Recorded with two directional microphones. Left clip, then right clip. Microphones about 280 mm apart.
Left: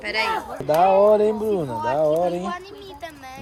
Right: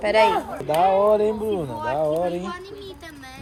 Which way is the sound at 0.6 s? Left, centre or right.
Left.